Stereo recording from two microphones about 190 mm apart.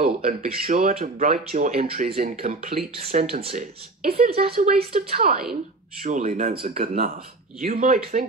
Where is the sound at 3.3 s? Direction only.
30° right (ahead or behind).